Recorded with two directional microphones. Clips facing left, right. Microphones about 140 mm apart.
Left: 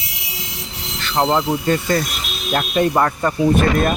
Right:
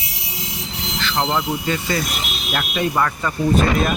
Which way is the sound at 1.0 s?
30° left (ahead or behind).